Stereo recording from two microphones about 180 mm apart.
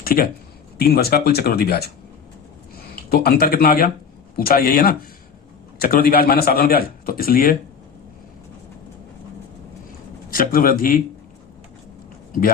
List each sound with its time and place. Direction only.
0.0 s a man's voice: 55° left (ahead or behind)
10.2 s speech: 50° left (ahead or behind)